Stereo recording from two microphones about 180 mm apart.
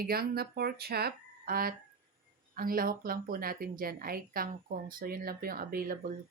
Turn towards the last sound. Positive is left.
turn(degrees=-55)  # may be behind; listen again after turning